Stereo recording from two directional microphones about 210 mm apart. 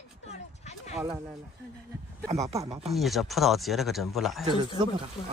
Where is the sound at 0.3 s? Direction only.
30° left (ahead or behind).